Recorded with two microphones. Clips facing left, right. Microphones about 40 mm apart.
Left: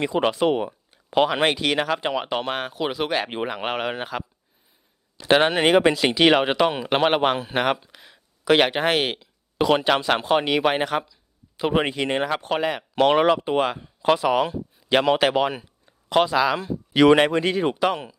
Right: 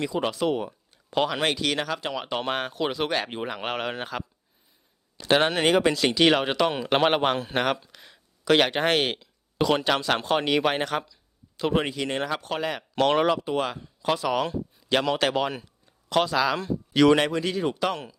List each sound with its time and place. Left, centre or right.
0.0 s speech: left
2.4 s speech: centre
3.2 s speech: left
3.5 s speech: centre
11.5 s speech: centre
13.4 s speech: left
14.4 s a sound: centre
15.0 s speech: left
15.3 s speech: centre
16.9 s speech: left
17.7 s speech: centre